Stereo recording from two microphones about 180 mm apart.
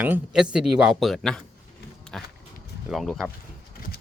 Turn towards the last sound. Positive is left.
turn(degrees=0)  # may be behind; listen again after turning